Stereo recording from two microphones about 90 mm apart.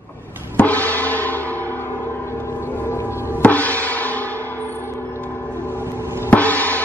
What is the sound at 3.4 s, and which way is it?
Music, 20° left (ahead or behind).